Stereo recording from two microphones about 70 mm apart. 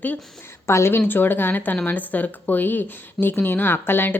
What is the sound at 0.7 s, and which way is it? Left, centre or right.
Speech, left.